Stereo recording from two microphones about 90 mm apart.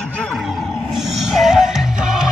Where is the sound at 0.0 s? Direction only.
10° left (ahead or behind).